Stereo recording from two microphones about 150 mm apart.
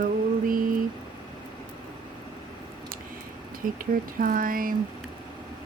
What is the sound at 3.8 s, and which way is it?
Speech, 70° right (ahead or behind).